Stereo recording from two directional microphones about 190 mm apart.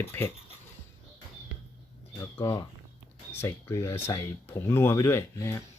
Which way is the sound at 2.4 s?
20° left (ahead or behind).